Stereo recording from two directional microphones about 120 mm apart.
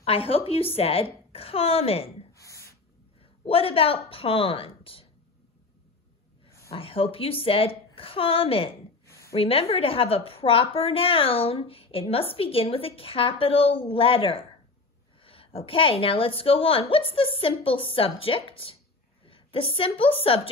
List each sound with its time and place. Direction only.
0.0 s a woman's voice: 50° left (ahead or behind)
2.3 s a sound: 25° left (ahead or behind)
3.2 s a woman's voice: 50° left (ahead or behind)
6.7 s a woman's voice: 50° left (ahead or behind)
9.0 s a sound: 25° left (ahead or behind)
9.3 s a woman's voice: 55° left (ahead or behind)